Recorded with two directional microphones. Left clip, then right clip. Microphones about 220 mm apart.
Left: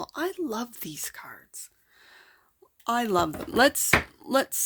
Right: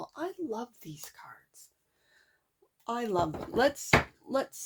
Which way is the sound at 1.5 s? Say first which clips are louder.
Left 13 dB; 45° left (ahead or behind).